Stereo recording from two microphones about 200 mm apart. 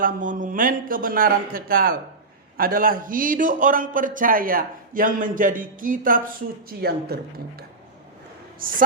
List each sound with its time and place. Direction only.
0.0 s a man's voice: 40° right (ahead or behind)
8.6 s a man's voice: 45° right (ahead or behind)